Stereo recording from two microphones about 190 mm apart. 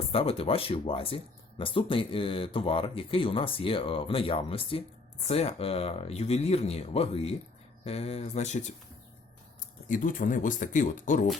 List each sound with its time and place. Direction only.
0.1 s speech: 30° left (ahead or behind)
9.9 s speech: 45° left (ahead or behind)